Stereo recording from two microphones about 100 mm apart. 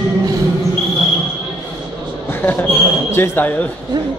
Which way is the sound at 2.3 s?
20° left (ahead or behind).